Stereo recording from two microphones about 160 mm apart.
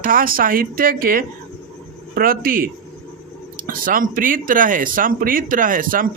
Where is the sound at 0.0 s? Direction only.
60° right (ahead or behind).